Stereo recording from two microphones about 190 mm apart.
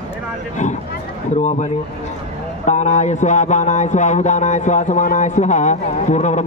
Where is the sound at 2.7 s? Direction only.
40° left (ahead or behind).